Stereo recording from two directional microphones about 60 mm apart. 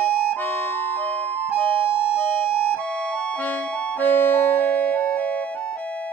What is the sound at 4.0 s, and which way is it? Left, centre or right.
Music, left.